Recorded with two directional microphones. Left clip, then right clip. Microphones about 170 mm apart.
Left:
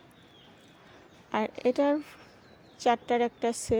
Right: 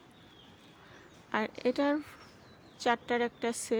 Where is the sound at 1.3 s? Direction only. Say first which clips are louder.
Left 3 dB; 10° left (ahead or behind).